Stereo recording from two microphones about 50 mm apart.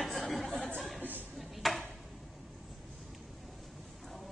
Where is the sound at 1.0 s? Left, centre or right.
Right.